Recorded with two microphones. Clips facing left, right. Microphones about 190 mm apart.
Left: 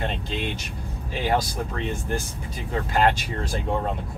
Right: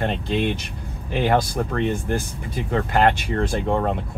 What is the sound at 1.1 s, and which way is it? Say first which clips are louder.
Speech: right 4 dB; 60° right (ahead or behind).